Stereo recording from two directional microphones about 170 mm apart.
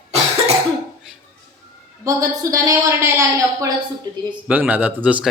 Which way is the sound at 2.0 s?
20° right (ahead or behind).